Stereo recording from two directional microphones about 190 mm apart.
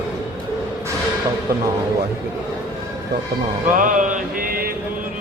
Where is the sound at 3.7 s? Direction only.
45° right (ahead or behind).